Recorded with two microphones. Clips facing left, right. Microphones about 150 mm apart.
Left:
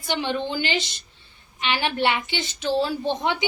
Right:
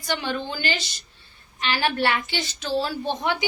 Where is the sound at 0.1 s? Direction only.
20° left (ahead or behind).